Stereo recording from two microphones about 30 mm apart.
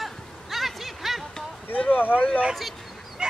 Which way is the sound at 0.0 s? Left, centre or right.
Centre.